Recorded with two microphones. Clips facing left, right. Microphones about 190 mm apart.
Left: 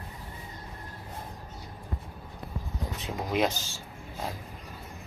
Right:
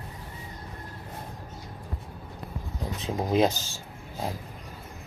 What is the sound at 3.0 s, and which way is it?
Speech, 30° right (ahead or behind).